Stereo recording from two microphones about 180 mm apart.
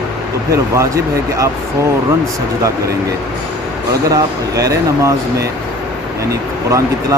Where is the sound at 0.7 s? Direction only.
15° right (ahead or behind).